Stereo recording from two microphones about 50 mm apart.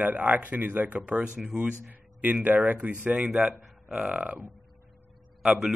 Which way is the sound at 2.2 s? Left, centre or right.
Right.